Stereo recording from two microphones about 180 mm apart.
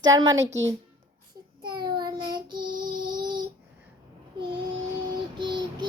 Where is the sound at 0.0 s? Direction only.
20° right (ahead or behind).